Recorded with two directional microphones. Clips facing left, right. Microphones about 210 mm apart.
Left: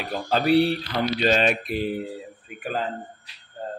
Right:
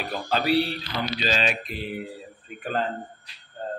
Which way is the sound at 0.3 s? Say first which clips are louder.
Left 4 dB; 50° left (ahead or behind).